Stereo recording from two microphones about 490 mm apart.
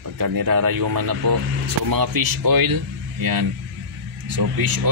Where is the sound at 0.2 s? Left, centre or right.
Right.